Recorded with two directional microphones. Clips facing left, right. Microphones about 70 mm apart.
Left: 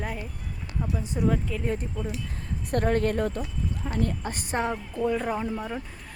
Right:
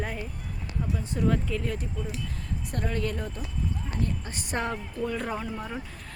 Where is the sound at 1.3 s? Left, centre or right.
Centre.